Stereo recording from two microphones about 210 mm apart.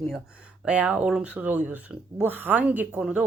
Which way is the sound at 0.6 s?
5° right (ahead or behind).